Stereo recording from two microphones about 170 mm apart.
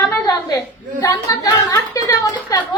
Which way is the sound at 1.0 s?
20° left (ahead or behind).